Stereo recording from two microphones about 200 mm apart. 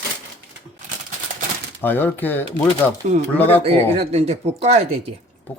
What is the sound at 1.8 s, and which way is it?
Speech, 10° left (ahead or behind).